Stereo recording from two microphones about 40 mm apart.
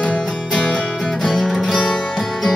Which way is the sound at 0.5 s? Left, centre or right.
Left.